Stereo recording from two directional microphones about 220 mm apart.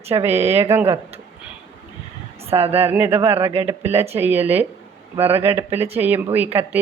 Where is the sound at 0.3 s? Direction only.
30° right (ahead or behind).